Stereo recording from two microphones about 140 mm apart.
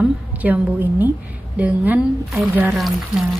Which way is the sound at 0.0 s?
10° right (ahead or behind).